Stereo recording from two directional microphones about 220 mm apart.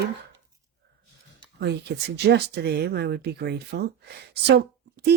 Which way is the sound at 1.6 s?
50° right (ahead or behind).